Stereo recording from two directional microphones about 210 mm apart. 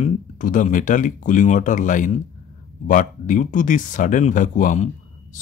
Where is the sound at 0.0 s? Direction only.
40° left (ahead or behind).